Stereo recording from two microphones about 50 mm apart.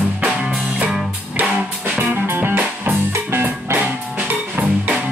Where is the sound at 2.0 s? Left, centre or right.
Right.